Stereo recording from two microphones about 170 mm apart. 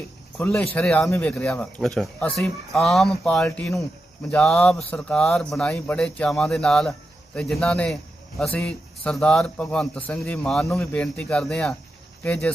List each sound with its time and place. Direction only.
0.3 s speech: 5° left (ahead or behind)